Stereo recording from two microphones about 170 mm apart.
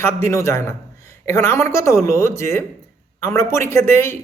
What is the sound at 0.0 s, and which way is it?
A man's voice, 15° left (ahead or behind).